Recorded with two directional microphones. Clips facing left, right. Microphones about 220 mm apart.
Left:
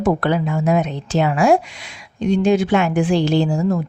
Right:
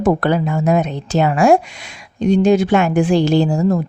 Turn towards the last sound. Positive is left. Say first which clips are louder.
# right 3 dB
turn(degrees=-40)  # may be behind; listen again after turning